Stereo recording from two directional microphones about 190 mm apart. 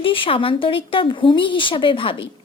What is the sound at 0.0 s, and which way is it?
A woman's voice, 25° left (ahead or behind).